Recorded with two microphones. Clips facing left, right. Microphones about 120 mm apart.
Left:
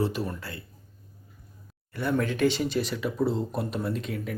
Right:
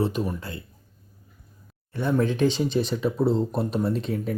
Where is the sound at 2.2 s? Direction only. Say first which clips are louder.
Right 3 dB; 20° right (ahead or behind).